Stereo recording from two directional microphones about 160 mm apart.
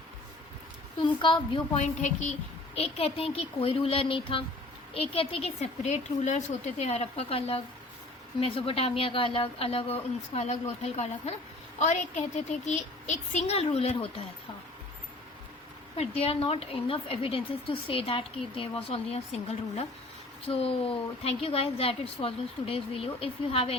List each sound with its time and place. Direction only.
1.0 s a woman's voice: 30° left (ahead or behind)
2.0 s a woman's voice: 50° left (ahead or behind)
12.4 s speech: 45° left (ahead or behind)
16.0 s a woman's voice: 40° left (ahead or behind)